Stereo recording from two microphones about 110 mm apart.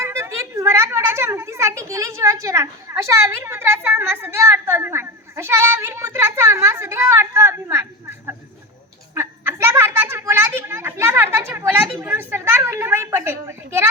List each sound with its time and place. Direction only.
0.0 s a woman's voice: 25° right (ahead or behind)
9.1 s a sound: 20° right (ahead or behind)
12.0 s a woman's voice: 20° right (ahead or behind)